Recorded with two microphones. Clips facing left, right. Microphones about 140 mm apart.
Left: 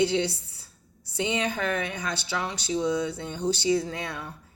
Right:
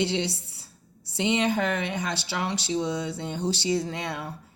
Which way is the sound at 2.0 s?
30° right (ahead or behind).